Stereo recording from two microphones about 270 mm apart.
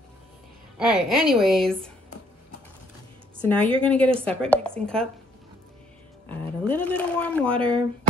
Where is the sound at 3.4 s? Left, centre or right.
Centre.